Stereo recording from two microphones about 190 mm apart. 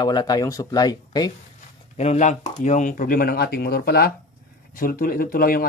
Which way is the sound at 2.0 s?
35° left (ahead or behind).